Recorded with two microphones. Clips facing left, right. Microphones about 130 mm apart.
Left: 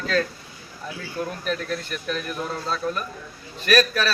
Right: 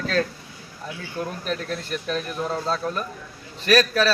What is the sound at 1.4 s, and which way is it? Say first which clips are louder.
A man's voice: left 1 dB; 35° right (ahead or behind).